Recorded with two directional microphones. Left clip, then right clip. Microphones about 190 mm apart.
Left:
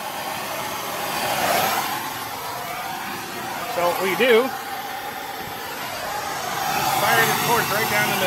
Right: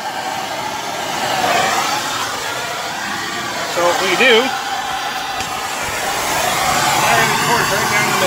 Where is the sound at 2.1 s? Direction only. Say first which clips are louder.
Right 9 dB; 25° right (ahead or behind).